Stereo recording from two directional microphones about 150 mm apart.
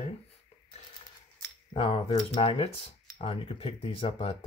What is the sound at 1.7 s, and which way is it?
Speech, 35° left (ahead or behind).